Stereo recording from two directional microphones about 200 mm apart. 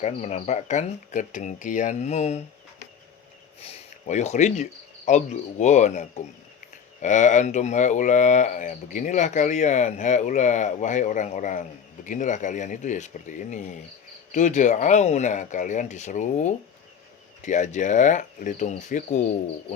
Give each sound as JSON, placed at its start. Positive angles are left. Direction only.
{"t": 0.0, "sound": "speech", "side_deg": 35}
{"t": 3.6, "sound": "speech", "side_deg": 30}